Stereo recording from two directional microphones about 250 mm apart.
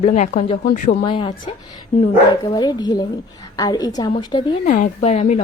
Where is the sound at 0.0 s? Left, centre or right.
Left.